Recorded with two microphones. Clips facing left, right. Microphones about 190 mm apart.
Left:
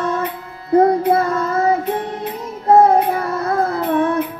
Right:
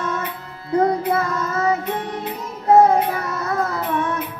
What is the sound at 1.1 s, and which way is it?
Child singing, 30° left (ahead or behind).